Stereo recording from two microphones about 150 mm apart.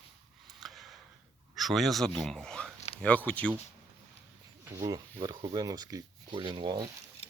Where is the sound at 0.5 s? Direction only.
Centre (ahead or behind).